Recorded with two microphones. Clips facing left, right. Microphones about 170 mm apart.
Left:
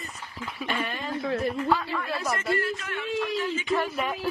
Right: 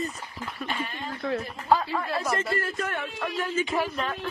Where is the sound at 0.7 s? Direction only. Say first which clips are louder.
Left 4 dB; 75° left (ahead or behind).